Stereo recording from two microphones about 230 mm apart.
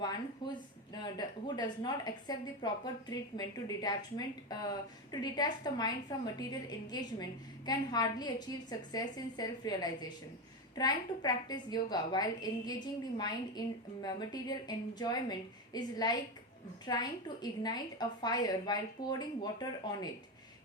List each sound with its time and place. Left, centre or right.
0.4 s a woman's voice: centre